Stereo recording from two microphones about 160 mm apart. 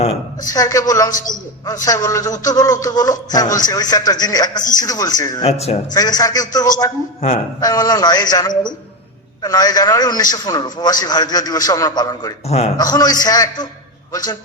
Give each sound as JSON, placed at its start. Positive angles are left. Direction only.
{"t": 0.4, "sound": "a man's voice", "side_deg": 20}
{"t": 5.4, "sound": "speech", "side_deg": 40}
{"t": 5.9, "sound": "a man's voice", "side_deg": 25}
{"t": 12.5, "sound": "speech", "side_deg": 40}
{"t": 12.7, "sound": "a man's voice", "side_deg": 25}